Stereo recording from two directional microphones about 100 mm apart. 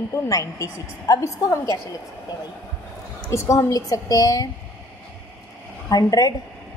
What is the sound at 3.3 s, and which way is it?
A woman's voice, 30° left (ahead or behind).